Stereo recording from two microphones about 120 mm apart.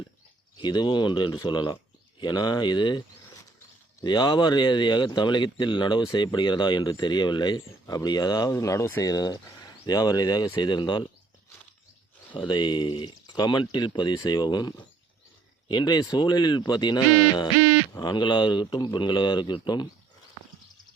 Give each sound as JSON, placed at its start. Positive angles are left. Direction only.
{"t": 0.6, "sound": "speech", "side_deg": 40}
{"t": 4.0, "sound": "speech", "side_deg": 40}
{"t": 12.3, "sound": "speech", "side_deg": 40}
{"t": 15.7, "sound": "speech", "side_deg": 35}